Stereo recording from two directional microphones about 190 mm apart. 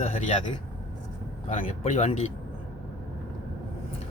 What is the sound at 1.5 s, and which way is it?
Speech, 40° left (ahead or behind).